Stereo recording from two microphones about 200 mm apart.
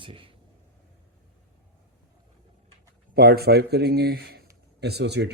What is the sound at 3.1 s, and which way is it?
Speech, 50° right (ahead or behind).